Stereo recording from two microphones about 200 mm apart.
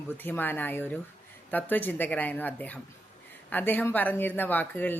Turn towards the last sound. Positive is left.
turn(degrees=10)  # may be behind; listen again after turning